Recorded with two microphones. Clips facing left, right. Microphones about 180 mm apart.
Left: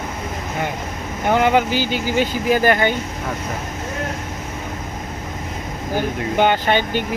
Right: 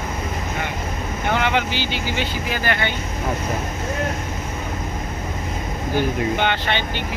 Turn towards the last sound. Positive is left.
turn(degrees=45)  # may be behind; listen again after turning